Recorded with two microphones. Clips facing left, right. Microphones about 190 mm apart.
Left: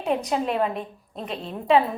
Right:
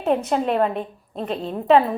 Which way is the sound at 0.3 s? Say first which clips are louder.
Right 4 dB; 40° right (ahead or behind).